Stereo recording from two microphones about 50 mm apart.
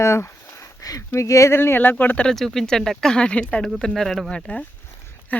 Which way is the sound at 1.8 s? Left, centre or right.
Left.